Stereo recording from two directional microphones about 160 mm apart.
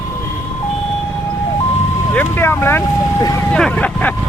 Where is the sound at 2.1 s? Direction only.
15° left (ahead or behind).